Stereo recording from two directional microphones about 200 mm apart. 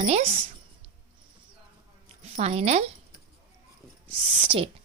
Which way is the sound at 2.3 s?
30° right (ahead or behind).